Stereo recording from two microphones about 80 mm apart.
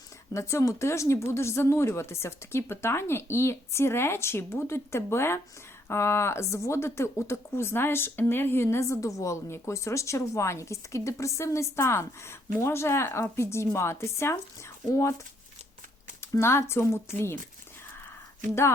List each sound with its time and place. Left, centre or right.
0.3 s speech: left
16.4 s speech: left